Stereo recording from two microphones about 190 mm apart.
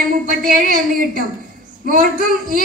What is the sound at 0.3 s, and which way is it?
Speech, 45° right (ahead or behind).